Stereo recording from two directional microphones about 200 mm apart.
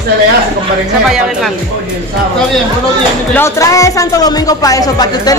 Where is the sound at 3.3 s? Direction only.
15° left (ahead or behind).